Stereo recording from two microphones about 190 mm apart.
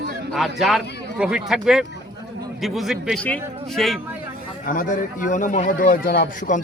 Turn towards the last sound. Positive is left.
turn(degrees=45)  # may be behind; listen again after turning